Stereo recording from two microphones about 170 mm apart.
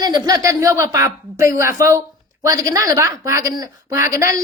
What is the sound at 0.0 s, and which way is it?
A woman's voice, 25° right (ahead or behind).